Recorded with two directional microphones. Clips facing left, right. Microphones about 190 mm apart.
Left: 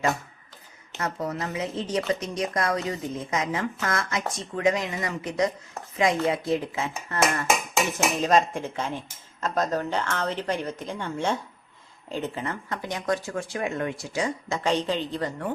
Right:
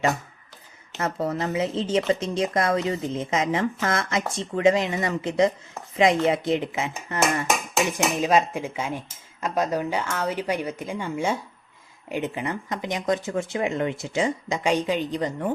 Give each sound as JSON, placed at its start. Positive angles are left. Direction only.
{"t": 0.9, "sound": "speech", "side_deg": -30}
{"t": 14.6, "sound": "speech", "side_deg": -10}